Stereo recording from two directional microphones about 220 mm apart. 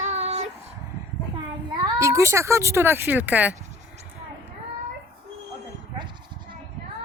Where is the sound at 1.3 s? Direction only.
15° right (ahead or behind).